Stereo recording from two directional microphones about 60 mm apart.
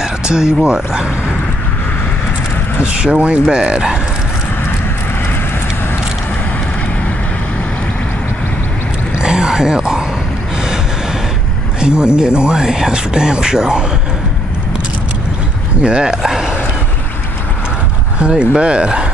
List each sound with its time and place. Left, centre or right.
0.0 s speech: centre
2.8 s speech: centre
9.2 s a sound: centre
11.8 s speech: centre
15.8 s speech: centre
18.3 s speech: centre